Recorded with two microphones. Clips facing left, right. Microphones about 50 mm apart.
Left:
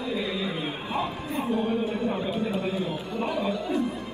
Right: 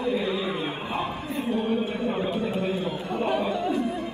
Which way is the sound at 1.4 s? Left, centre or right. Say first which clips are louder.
Even; centre.